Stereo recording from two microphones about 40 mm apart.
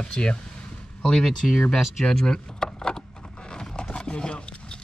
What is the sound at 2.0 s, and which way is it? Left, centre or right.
Vehicle, centre.